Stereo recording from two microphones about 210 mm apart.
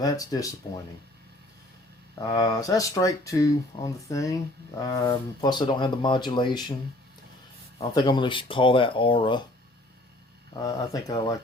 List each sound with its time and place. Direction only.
0.0 s speech: 15° left (ahead or behind)
2.2 s speech: 15° left (ahead or behind)
7.8 s speech: 20° left (ahead or behind)
10.5 s speech: 15° left (ahead or behind)